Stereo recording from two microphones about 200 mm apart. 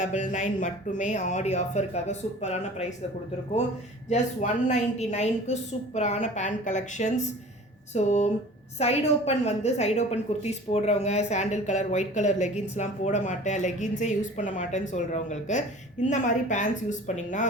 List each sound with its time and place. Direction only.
0.0 s a woman's voice: 40° left (ahead or behind)
4.1 s a woman's voice: 35° left (ahead or behind)